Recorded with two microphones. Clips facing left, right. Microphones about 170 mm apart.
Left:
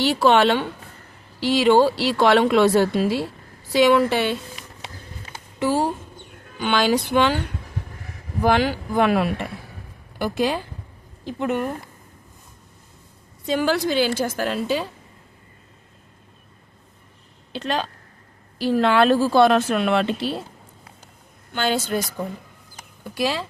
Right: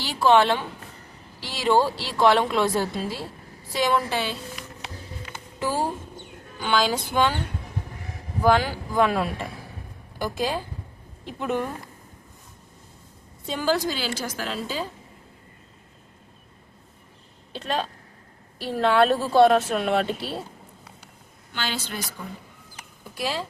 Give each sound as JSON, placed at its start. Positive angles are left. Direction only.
{"t": 0.0, "sound": "a woman's voice", "side_deg": 70}
{"t": 5.5, "sound": "music", "side_deg": 70}
{"t": 8.4, "sound": "a woman's voice", "side_deg": 70}
{"t": 13.4, "sound": "a woman's voice", "side_deg": 80}
{"t": 17.5, "sound": "a woman's voice", "side_deg": 80}
{"t": 21.5, "sound": "a woman's voice", "side_deg": 50}
{"t": 23.1, "sound": "a woman's voice", "side_deg": 90}